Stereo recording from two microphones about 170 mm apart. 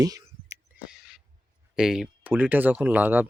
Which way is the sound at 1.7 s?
5° right (ahead or behind).